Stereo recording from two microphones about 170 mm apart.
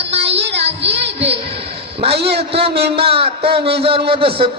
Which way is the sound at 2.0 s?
35° right (ahead or behind).